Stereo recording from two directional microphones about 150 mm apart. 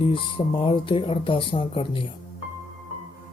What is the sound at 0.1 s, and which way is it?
Speech, 35° left (ahead or behind).